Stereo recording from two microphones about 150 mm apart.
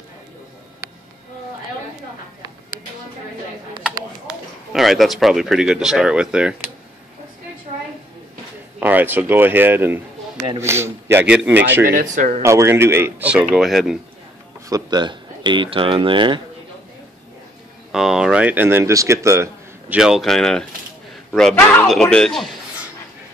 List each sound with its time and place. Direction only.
3.8 s speech: 5° right (ahead or behind)
8.7 s speech: 10° right (ahead or behind)
12.0 s speech: 55° right (ahead or behind)
12.4 s speech: 20° right (ahead or behind); by 13.9 s centre (ahead or behind)
14.7 s speech: 30° right (ahead or behind)
17.9 s speech: 5° right (ahead or behind)
20.0 s a man's voice: 5° right (ahead or behind)